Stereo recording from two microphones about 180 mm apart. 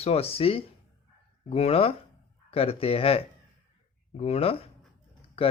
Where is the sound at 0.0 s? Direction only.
35° left (ahead or behind).